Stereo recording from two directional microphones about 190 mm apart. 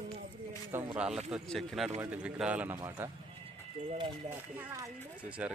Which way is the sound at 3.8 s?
25° right (ahead or behind).